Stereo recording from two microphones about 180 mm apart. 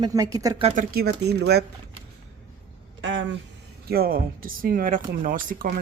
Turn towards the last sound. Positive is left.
turn(degrees=-50)  # may be behind; listen again after turning